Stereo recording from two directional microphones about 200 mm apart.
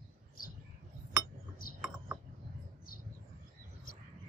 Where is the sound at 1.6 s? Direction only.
45° left (ahead or behind).